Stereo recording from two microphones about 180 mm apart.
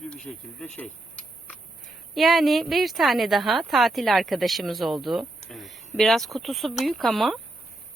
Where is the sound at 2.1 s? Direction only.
Centre (ahead or behind).